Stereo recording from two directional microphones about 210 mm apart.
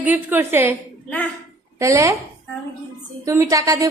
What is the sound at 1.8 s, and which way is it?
Speech, 15° right (ahead or behind).